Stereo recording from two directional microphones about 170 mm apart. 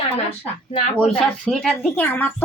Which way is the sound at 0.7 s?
30° left (ahead or behind).